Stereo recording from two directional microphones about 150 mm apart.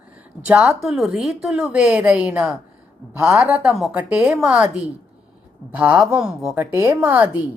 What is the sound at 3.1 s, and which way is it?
Speech, 15° right (ahead or behind).